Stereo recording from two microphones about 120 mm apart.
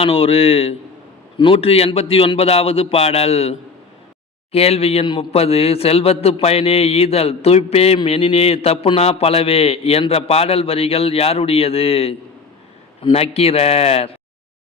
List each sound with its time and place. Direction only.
0.0 s a man's voice: 55° left (ahead or behind)